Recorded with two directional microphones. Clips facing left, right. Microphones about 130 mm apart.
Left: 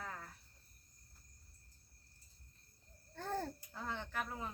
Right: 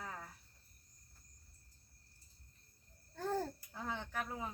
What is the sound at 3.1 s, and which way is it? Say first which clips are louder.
Speech: right 3 dB; 10° right (ahead or behind).